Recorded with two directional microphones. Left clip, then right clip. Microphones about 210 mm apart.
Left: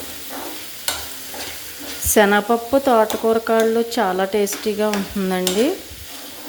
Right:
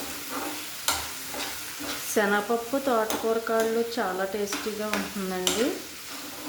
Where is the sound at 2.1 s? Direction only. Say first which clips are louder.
Left 10 dB; 35° left (ahead or behind).